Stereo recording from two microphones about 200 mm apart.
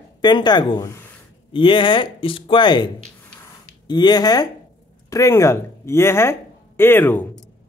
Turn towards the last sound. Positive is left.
turn(degrees=10)  # may be behind; listen again after turning